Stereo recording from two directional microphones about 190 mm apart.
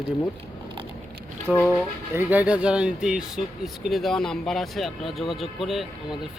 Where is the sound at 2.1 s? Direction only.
10° right (ahead or behind).